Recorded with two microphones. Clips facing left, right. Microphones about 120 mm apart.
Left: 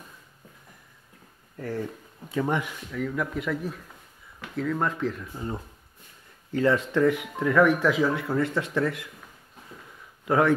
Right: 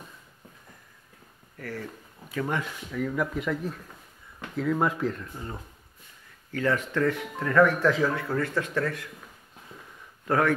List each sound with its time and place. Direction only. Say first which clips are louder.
1.6 s speech: left 5 dB; 25° left (ahead or behind)
2.9 s speech: right 1 dB; centre (ahead or behind)
6.5 s speech: left 4 dB; 20° left (ahead or behind)
10.2 s speech: left 2 dB; 15° left (ahead or behind)